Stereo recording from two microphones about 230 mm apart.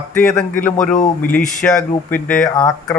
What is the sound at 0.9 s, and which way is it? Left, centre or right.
Speech, left.